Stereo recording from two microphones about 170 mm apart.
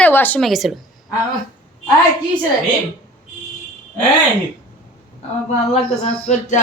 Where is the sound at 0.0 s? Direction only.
10° left (ahead or behind).